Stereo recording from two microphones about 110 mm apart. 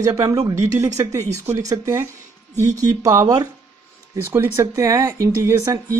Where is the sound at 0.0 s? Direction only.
35° right (ahead or behind).